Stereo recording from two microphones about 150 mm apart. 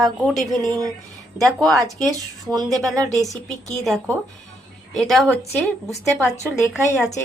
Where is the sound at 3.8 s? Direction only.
Centre (ahead or behind).